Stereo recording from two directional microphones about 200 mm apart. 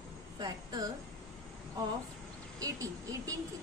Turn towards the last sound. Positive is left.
turn(degrees=-15)  # may be behind; listen again after turning